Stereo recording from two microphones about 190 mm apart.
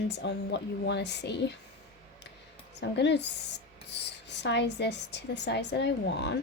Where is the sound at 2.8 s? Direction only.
65° left (ahead or behind).